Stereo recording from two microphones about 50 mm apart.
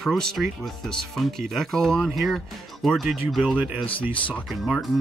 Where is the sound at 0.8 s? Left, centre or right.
Centre.